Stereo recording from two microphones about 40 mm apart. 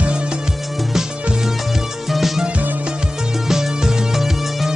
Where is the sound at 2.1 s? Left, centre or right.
Centre.